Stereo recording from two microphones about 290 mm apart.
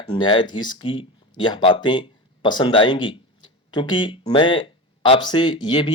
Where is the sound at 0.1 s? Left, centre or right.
Centre.